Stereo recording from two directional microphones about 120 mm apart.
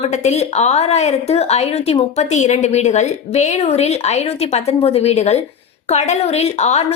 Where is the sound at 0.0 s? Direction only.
70° left (ahead or behind).